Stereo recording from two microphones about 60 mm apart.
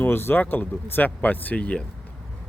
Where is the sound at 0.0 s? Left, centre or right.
Left.